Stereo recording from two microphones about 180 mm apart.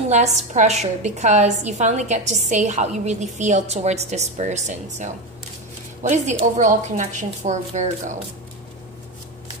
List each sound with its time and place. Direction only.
0.5 s a woman's voice: 40° right (ahead or behind)